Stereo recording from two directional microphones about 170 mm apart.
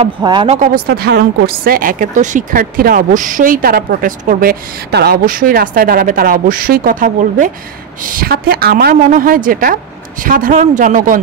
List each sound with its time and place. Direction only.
0.2 s speech: 30° right (ahead or behind)
0.6 s a woman's voice: 65° right (ahead or behind)